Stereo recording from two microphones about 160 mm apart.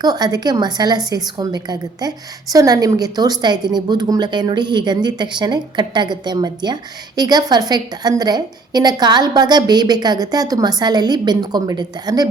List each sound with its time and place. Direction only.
0.0 s a woman's voice: 25° right (ahead or behind)